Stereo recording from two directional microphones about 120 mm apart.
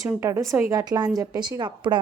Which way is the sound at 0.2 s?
20° right (ahead or behind).